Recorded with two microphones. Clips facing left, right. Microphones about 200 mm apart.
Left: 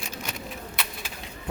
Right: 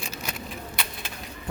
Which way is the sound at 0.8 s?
Centre (ahead or behind).